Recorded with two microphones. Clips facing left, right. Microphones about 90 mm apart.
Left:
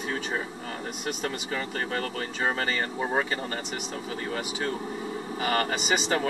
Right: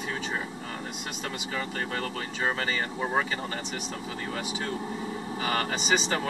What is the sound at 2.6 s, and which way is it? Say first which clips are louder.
Speech: left 1 dB; 45° left (ahead or behind).